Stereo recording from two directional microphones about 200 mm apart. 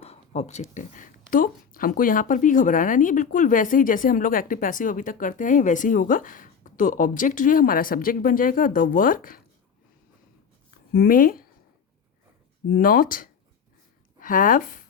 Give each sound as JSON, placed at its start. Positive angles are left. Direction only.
{"t": 0.0, "sound": "a sound", "side_deg": 30}
{"t": 0.7, "sound": "speech", "side_deg": 40}
{"t": 10.9, "sound": "speech", "side_deg": 45}
{"t": 12.7, "sound": "a woman's voice", "side_deg": 45}